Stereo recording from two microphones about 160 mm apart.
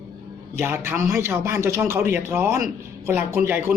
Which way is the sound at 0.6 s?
15° right (ahead or behind).